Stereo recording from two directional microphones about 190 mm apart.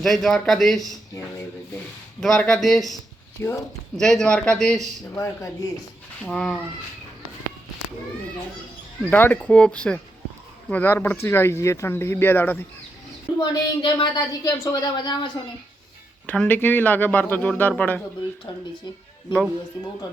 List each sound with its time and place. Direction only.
0.0 s a man's voice: centre (ahead or behind)
2.2 s a man's voice: 5° left (ahead or behind)
3.4 s speech: 15° left (ahead or behind)
3.9 s a man's voice: centre (ahead or behind)
5.1 s speech: 15° left (ahead or behind)
6.2 s a man's voice: 5° left (ahead or behind)
9.0 s speech: 10° left (ahead or behind)
13.4 s a woman's voice: 25° left (ahead or behind)
16.2 s speech: 5° left (ahead or behind)
18.5 s a woman's voice: 25° left (ahead or behind)